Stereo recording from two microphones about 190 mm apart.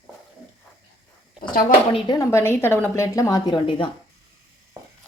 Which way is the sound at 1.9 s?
20° left (ahead or behind).